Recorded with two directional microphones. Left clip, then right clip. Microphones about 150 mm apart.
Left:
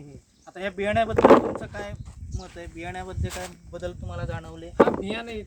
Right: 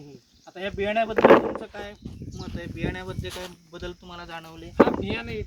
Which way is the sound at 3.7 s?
50° left (ahead or behind).